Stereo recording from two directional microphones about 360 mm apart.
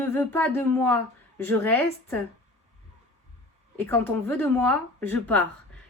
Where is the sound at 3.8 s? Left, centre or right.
Centre.